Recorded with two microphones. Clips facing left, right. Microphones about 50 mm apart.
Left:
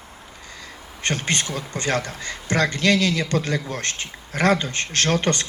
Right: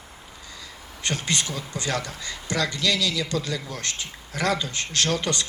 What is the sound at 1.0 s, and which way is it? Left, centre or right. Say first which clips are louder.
A man's voice: left 3 dB; left.